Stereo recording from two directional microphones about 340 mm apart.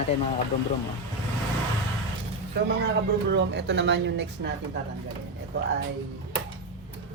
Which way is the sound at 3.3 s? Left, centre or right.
Right.